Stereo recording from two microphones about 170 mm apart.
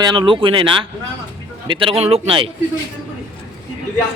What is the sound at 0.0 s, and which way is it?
A man's voice, 25° right (ahead or behind).